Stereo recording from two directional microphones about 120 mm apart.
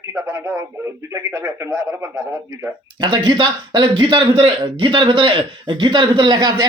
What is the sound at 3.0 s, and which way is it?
A man's voice, 40° right (ahead or behind).